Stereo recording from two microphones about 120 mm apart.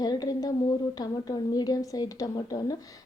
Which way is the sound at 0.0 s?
30° left (ahead or behind).